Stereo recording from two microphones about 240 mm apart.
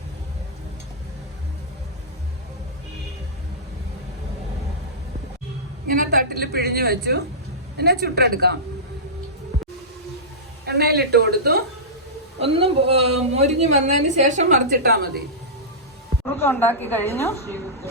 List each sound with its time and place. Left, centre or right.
5.9 s a woman's voice: right
10.7 s a woman's voice: right
12.4 s a woman's voice: right
16.2 s a woman's voice: centre